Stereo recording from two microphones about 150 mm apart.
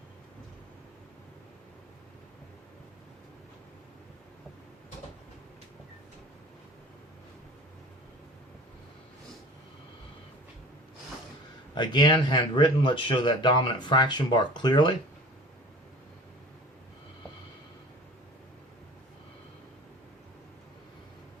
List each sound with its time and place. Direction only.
11.7 s speech: 30° left (ahead or behind)